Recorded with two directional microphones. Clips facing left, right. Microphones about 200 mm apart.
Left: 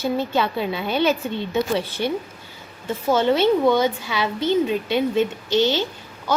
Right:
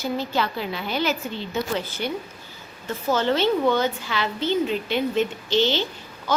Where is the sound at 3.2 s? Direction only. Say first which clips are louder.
Left 4 dB; 15° left (ahead or behind).